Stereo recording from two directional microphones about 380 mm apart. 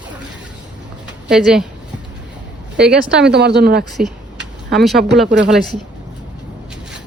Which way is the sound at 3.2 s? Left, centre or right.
Right.